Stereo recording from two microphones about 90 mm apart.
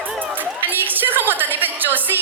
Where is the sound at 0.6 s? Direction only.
20° right (ahead or behind).